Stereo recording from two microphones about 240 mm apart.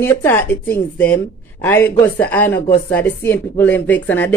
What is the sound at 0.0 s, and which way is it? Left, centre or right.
Speech, centre.